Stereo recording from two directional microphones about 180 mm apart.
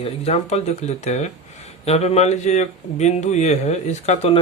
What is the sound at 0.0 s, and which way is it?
Speech, 35° left (ahead or behind).